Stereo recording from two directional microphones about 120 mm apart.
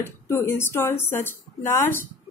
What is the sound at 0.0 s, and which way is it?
Speech, 20° left (ahead or behind).